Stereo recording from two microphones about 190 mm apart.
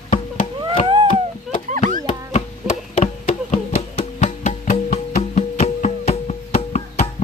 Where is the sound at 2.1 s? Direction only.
35° left (ahead or behind).